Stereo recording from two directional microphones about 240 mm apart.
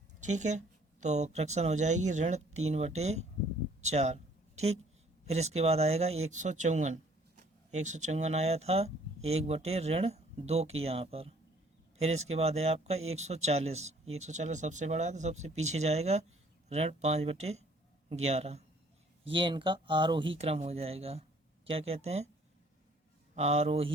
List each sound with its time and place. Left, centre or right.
0.2 s speech: right
3.8 s a sound: right
5.2 s speech: right
23.3 s speech: right